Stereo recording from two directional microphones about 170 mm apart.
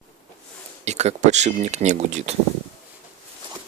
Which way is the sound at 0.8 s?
40° right (ahead or behind).